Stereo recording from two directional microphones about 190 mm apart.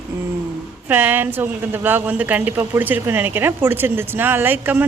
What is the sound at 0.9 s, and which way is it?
A woman's voice, 10° right (ahead or behind).